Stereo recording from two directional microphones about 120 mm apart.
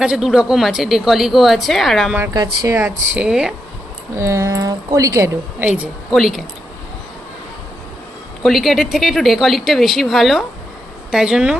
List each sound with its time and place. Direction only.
0.0 s a woman's voice: 5° right (ahead or behind)
2.3 s speech: 35° right (ahead or behind)
3.2 s a woman's voice: 5° right (ahead or behind)
4.2 s speech: 25° right (ahead or behind)
5.6 s a woman's voice: 15° right (ahead or behind)
6.1 s a woman's voice: centre (ahead or behind)
8.4 s a woman's voice: centre (ahead or behind)